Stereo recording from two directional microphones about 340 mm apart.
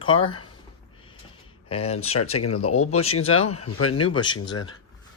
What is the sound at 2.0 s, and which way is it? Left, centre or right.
Speech, left.